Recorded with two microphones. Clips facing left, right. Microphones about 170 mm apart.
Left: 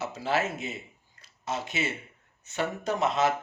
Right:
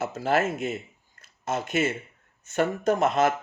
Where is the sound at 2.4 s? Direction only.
50° right (ahead or behind).